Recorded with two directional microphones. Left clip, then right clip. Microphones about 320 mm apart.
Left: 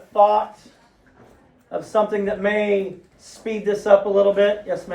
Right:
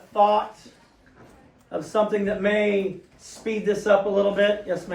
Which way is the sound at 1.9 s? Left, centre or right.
Left.